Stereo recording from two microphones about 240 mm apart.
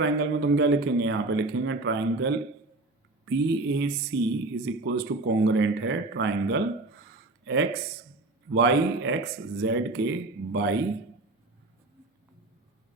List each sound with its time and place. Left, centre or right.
0.0 s speech: right